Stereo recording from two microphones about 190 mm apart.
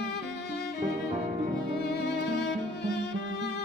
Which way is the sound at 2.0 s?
60° left (ahead or behind).